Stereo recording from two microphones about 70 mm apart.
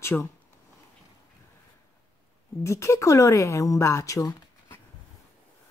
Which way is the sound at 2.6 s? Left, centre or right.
Left.